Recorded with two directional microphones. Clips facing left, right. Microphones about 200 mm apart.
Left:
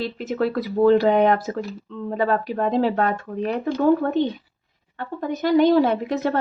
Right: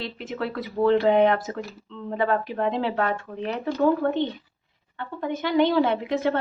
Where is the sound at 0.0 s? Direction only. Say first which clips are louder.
Left 7 dB; 40° left (ahead or behind).